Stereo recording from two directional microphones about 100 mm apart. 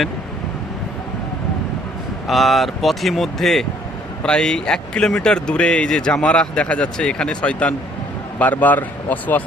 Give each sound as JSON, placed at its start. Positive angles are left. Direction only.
{"t": 2.2, "sound": "speech", "side_deg": 0}